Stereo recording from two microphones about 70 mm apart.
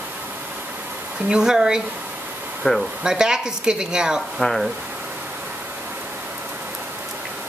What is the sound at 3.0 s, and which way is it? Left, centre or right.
A woman's voice, centre.